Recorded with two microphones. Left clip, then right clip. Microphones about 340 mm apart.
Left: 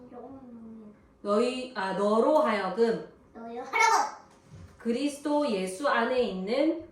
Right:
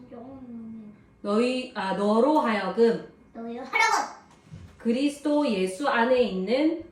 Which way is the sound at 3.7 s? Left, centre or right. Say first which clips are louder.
Right 1 dB; centre.